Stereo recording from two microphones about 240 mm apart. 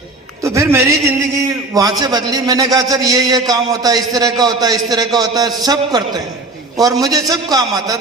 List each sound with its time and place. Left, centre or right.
0.4 s a man's voice: centre